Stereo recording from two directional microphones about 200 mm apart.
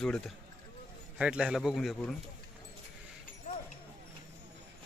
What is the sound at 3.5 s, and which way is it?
Horse, 40° left (ahead or behind).